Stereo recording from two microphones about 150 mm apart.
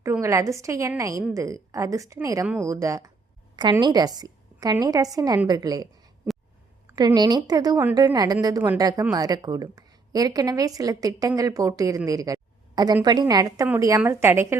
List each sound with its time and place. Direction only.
0.0 s a woman's voice: 20° right (ahead or behind)
6.9 s a woman's voice: 25° right (ahead or behind)